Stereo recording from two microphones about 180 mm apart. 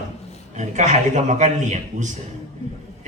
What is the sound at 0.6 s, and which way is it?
A man's voice, 40° right (ahead or behind).